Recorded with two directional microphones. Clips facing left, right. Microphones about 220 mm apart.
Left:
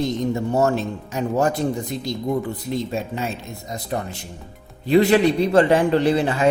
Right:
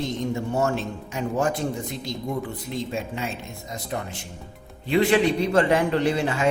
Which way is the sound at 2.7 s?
40° left (ahead or behind).